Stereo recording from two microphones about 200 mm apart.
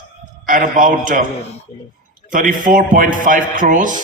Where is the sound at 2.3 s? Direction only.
40° right (ahead or behind).